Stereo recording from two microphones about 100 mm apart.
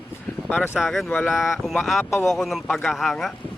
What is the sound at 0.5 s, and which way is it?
Speech, 25° left (ahead or behind).